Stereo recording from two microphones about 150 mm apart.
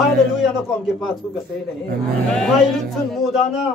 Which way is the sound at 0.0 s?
5° right (ahead or behind).